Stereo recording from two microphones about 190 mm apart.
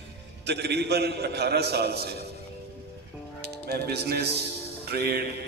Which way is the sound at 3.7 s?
55° right (ahead or behind).